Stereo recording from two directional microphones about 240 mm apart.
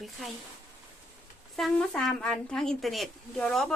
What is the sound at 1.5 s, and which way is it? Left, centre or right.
Speech, centre.